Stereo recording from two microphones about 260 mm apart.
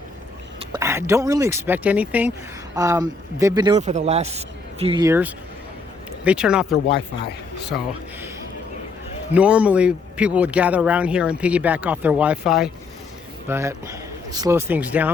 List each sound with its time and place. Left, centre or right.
0.6 s speech: centre
3.8 s speech: right; by 6.7 s centre
9.3 s speech: centre